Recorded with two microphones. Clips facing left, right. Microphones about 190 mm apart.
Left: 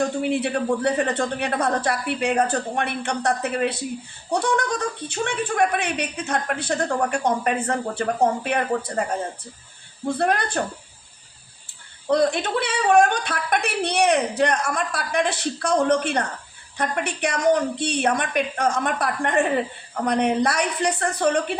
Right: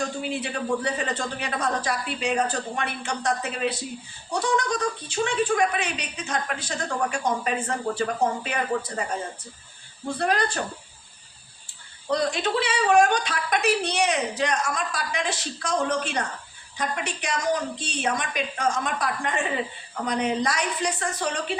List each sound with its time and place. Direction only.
0.0 s a woman's voice: 60° left (ahead or behind)
10.2 s a woman's voice: 55° left (ahead or behind)
12.0 s a woman's voice: 55° left (ahead or behind)